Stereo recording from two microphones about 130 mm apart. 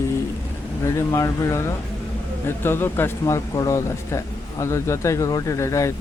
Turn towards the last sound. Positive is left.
turn(degrees=25)  # may be behind; listen again after turning